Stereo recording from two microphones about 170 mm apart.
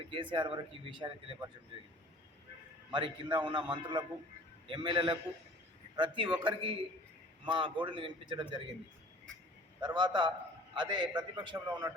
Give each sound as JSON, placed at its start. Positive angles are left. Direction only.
{"t": 0.1, "sound": "speech", "side_deg": -30}
{"t": 2.9, "sound": "speech", "side_deg": -25}
{"t": 9.8, "sound": "speech", "side_deg": -25}